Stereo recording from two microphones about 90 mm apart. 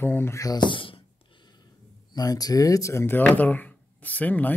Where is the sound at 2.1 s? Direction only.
45° left (ahead or behind).